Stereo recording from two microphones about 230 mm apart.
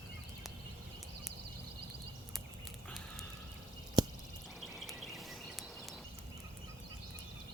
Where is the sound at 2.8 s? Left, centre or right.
Centre.